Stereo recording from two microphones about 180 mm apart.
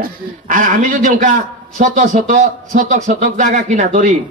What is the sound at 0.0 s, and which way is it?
A man's voice, 45° right (ahead or behind).